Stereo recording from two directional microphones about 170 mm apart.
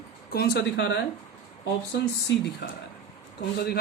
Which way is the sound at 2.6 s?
70° left (ahead or behind).